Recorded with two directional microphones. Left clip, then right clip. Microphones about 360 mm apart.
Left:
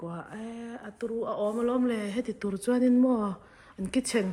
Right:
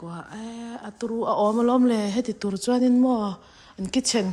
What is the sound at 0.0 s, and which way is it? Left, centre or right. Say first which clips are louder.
Speech: right 2 dB; centre.